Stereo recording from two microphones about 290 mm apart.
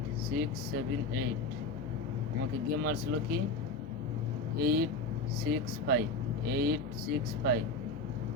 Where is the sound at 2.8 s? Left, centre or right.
Right.